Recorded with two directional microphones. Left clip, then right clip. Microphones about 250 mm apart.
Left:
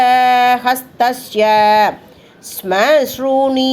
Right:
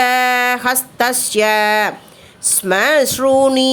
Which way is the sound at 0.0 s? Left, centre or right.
Right.